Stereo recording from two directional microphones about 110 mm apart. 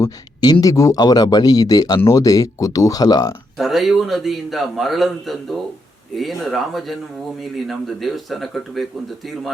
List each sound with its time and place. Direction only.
0.6 s speech: 30° left (ahead or behind)
3.6 s a man's voice: centre (ahead or behind)